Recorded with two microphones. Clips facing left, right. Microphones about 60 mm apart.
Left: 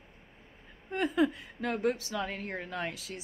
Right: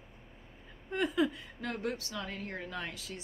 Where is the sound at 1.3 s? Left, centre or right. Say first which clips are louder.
Left 5 dB; left.